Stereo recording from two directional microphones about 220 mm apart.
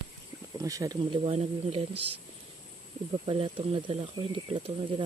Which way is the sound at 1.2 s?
30° right (ahead or behind).